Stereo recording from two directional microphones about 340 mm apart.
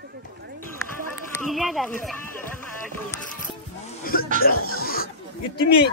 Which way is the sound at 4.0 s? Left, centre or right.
Left.